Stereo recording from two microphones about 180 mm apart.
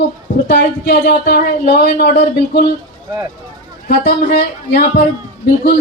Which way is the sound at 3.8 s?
60° left (ahead or behind).